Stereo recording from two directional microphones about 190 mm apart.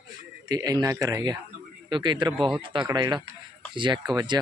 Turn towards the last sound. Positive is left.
turn(degrees=-20)  # may be behind; listen again after turning